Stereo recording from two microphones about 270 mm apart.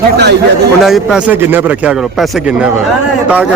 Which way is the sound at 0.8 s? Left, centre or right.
Centre.